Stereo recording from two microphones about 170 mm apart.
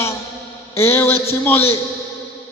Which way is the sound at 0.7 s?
15° left (ahead or behind).